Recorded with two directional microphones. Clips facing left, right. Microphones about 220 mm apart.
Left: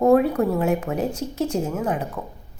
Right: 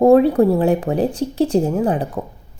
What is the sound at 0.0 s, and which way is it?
A woman's voice, 30° right (ahead or behind).